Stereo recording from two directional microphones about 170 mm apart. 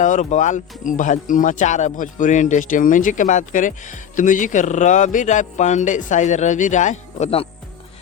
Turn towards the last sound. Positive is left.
turn(degrees=40)  # may be behind; listen again after turning